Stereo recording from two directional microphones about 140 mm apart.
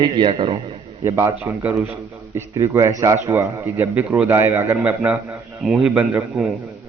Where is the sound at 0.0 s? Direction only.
35° right (ahead or behind).